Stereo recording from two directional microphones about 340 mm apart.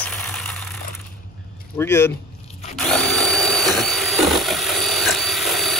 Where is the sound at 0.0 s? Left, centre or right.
Centre.